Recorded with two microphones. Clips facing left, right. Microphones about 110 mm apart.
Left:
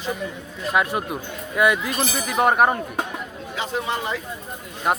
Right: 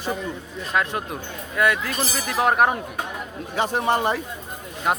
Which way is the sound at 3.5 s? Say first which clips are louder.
Right 5 dB; 55° right (ahead or behind).